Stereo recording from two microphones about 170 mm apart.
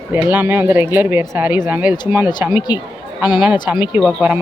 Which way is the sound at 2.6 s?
25° left (ahead or behind).